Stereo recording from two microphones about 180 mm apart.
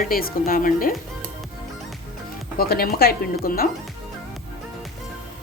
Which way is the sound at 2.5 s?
60° left (ahead or behind).